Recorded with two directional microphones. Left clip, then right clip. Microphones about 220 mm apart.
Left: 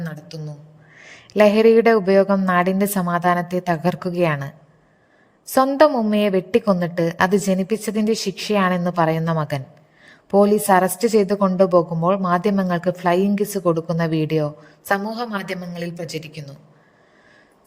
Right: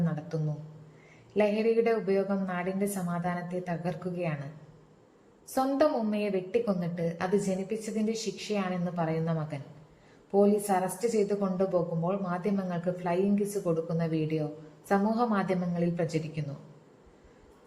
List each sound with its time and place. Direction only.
0.0 s a sound: 45° left (ahead or behind)
1.3 s a woman's voice: 50° left (ahead or behind)
5.5 s a woman's voice: 50° left (ahead or behind)